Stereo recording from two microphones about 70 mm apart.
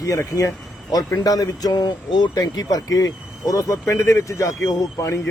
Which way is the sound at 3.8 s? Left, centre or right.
Left.